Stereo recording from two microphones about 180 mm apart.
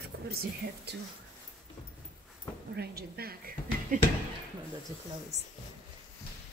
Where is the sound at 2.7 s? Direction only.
65° right (ahead or behind).